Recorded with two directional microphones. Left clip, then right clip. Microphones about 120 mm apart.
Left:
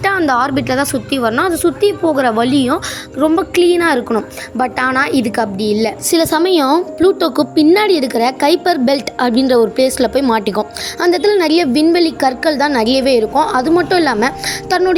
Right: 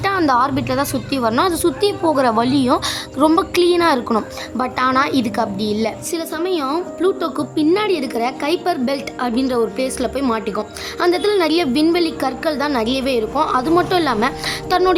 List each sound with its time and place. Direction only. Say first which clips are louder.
0.3 s a woman's voice: left 2 dB; 20° left (ahead or behind)
1.3 s a woman's voice: left 2 dB; 5° left (ahead or behind)
3.2 s a woman's voice: left 2 dB; centre (ahead or behind); by 5.9 s 15° left (ahead or behind)
6.1 s a woman's voice: left 9 dB; 65° left (ahead or behind); by 10.7 s 40° left (ahead or behind)
11.0 s a woman's voice: left 4 dB; 20° left (ahead or behind)